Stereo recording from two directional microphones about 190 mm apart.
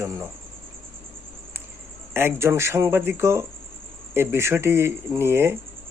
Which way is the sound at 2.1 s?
10° right (ahead or behind).